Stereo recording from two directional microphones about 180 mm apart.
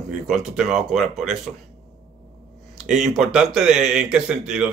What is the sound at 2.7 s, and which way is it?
Speech, 5° right (ahead or behind).